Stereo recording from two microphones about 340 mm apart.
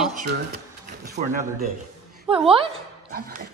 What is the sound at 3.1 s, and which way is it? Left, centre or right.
Dog, right.